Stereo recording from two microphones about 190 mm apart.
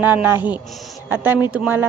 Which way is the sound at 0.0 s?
10° right (ahead or behind).